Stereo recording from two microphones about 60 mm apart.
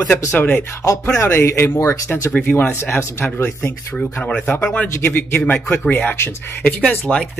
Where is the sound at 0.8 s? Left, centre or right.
Left.